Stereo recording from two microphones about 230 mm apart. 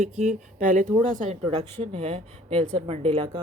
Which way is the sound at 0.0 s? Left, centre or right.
Right.